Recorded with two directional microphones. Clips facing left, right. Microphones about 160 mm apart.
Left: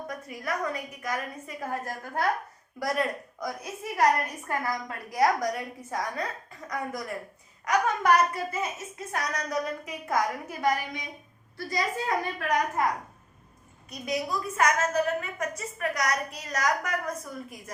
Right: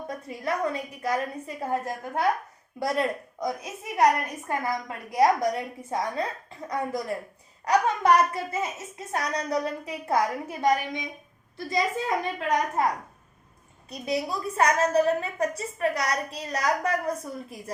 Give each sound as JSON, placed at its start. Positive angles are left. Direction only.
{"t": 0.1, "sound": "a woman's voice", "side_deg": -30}
{"t": 13.9, "sound": "a woman's voice", "side_deg": -30}